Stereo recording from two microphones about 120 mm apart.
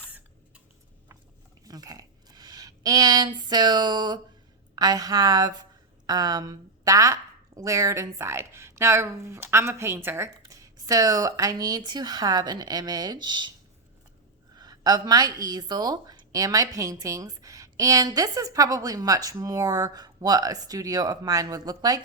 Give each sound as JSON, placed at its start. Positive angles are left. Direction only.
{"t": 1.6, "sound": "a woman's voice", "side_deg": -30}
{"t": 14.5, "sound": "a woman's voice", "side_deg": -35}